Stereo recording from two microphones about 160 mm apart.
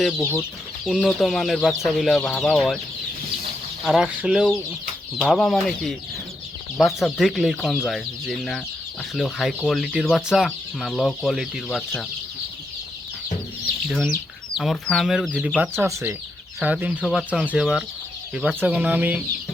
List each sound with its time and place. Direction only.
0.2 s chicken: 15° left (ahead or behind)
0.9 s speech: centre (ahead or behind)
3.8 s speech: centre (ahead or behind)
13.8 s speech: 5° left (ahead or behind)